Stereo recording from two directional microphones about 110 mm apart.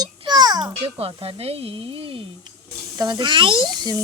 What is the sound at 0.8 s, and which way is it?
Speech, 60° right (ahead or behind).